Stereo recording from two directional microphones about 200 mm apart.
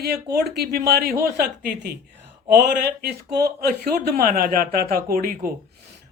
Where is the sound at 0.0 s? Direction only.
55° right (ahead or behind).